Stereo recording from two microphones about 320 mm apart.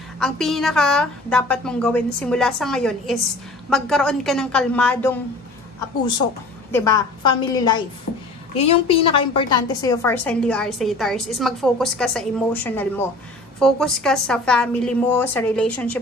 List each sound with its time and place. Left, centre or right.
0.2 s a woman's voice: centre
6.7 s a woman's voice: centre